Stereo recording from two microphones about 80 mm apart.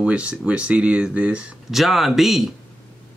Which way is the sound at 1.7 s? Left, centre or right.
Centre.